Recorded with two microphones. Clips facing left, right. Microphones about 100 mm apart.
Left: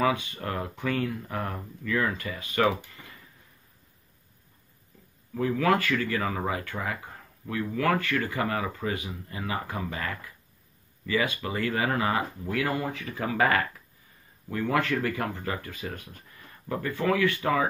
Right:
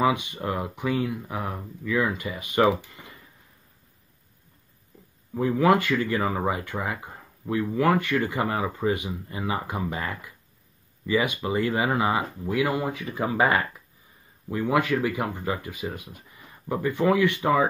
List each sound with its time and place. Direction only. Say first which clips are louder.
0.0 s speech: right 3 dB; 20° right (ahead or behind)
5.3 s speech: right 4 dB; 20° right (ahead or behind)